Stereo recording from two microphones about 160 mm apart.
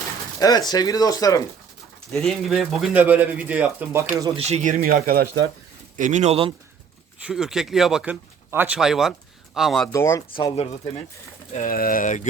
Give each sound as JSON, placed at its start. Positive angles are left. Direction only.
{"t": 0.3, "sound": "speech", "side_deg": 25}
{"t": 2.1, "sound": "speech", "side_deg": 0}
{"t": 4.1, "sound": "speech", "side_deg": -20}
{"t": 4.4, "sound": "speech", "side_deg": -40}
{"t": 6.0, "sound": "speech", "side_deg": -50}
{"t": 7.2, "sound": "speech", "side_deg": -5}
{"t": 9.9, "sound": "speech", "side_deg": 20}
{"t": 11.5, "sound": "speech", "side_deg": 60}